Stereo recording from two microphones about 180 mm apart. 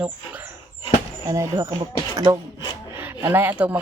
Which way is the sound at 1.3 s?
15° right (ahead or behind).